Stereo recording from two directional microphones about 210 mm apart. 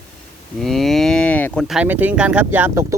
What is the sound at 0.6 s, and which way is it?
Speech, centre (ahead or behind).